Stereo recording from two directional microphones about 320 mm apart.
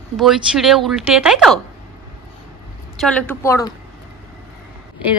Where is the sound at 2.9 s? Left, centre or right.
Centre.